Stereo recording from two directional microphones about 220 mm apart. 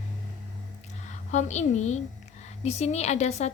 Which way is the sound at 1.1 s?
30° left (ahead or behind).